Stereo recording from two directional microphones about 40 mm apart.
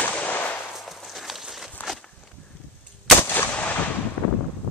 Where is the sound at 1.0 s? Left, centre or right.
Centre.